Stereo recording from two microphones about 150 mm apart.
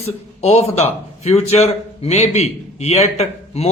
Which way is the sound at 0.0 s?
45° left (ahead or behind).